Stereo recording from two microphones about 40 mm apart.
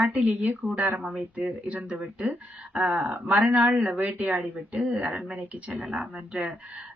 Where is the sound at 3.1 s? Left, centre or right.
Right.